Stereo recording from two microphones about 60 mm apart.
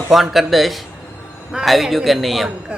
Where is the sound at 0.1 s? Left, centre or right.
Centre.